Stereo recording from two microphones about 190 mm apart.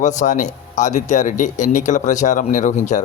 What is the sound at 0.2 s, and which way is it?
Speech, 40° left (ahead or behind).